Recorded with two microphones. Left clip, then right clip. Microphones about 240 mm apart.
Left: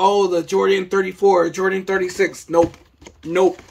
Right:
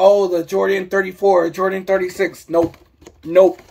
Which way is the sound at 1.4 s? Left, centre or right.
Centre.